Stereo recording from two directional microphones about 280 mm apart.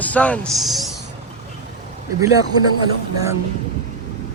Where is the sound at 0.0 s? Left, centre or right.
Centre.